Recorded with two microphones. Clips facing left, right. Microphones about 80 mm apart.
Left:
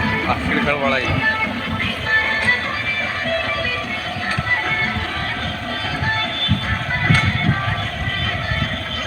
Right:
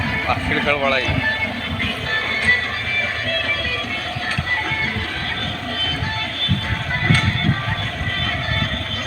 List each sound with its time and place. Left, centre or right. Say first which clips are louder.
0.3 s speech: right 2 dB; centre